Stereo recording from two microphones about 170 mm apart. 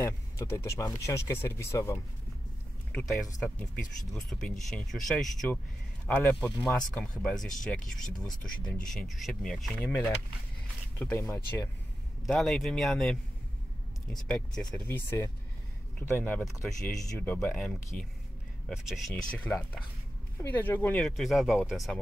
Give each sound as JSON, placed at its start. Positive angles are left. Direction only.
{"t": 0.0, "sound": "speech", "side_deg": 15}
{"t": 2.9, "sound": "speech", "side_deg": 5}
{"t": 12.3, "sound": "speech", "side_deg": 0}